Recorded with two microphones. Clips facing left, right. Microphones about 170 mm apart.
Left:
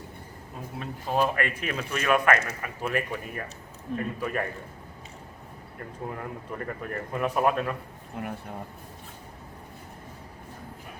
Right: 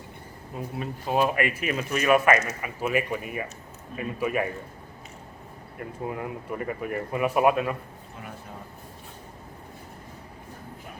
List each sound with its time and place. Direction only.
0.8 s speech: 10° right (ahead or behind)
6.1 s speech: 10° right (ahead or behind)
8.2 s speech: 60° left (ahead or behind)